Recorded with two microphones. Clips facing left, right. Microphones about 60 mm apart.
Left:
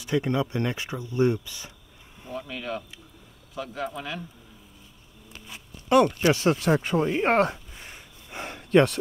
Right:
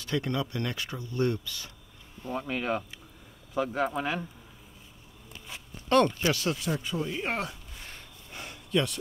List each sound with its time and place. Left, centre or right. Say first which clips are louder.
0.0 s speech: left 5 dB; centre
2.3 s speech: right 2 dB; right
5.9 s speech: left 3 dB; centre
6.3 s speech: left 7 dB; left
6.6 s speech: left 8 dB; left
7.7 s a sound: left 1 dB; centre
8.4 s a sound: left 9 dB; left